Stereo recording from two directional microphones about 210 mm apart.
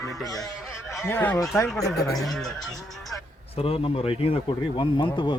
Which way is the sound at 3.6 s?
25° left (ahead or behind).